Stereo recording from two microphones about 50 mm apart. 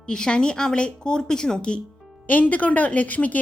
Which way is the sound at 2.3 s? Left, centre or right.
Left.